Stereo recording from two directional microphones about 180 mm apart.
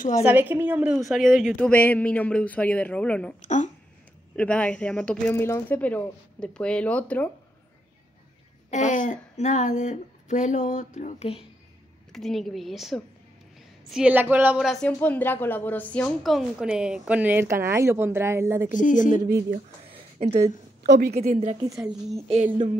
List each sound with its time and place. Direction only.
0.2 s a woman's voice: 10° right (ahead or behind); by 3.3 s 5° left (ahead or behind)
3.3 s speech: 40° left (ahead or behind)
4.4 s a woman's voice: 5° left (ahead or behind)
8.6 s speech: 45° left (ahead or behind)
12.1 s speech: centre (ahead or behind); by 18.7 s 15° right (ahead or behind)
18.7 s speech: 45° left (ahead or behind)
19.9 s a sound: 35° right (ahead or behind)
20.8 s a woman's voice: 70° right (ahead or behind)
21.1 s a woman's voice: 35° right (ahead or behind)
21.7 s speech: centre (ahead or behind)